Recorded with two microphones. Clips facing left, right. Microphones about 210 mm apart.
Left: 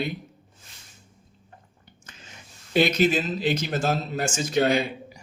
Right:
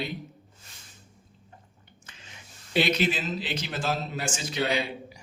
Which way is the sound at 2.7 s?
45° left (ahead or behind).